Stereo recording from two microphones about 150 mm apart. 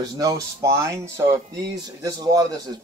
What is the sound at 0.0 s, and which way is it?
Speech, 25° right (ahead or behind).